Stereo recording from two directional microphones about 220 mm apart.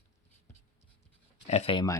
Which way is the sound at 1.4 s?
30° left (ahead or behind).